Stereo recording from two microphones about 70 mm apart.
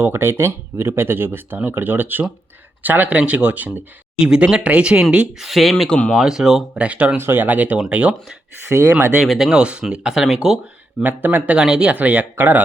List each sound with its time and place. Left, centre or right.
0.0 s speech: right; by 5.0 s centre
5.3 s speech: centre
6.1 s speech: centre
6.8 s speech: centre
7.2 s speech: right
8.7 s speech: right
9.2 s speech: centre
9.5 s speech: centre
11.0 s speech: right
11.5 s speech: centre